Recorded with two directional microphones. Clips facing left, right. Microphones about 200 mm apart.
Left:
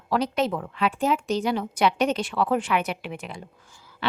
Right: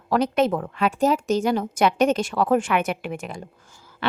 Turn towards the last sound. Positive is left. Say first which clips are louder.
# right 4 dB
turn(degrees=-45)  # may be behind; listen again after turning